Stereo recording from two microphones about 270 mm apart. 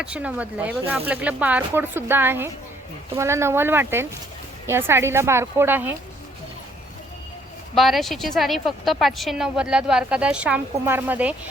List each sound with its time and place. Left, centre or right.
0.0 s a woman's voice: centre
7.8 s a woman's voice: centre